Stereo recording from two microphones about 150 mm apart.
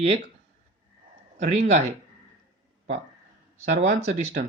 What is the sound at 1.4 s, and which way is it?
Speech, 50° right (ahead or behind).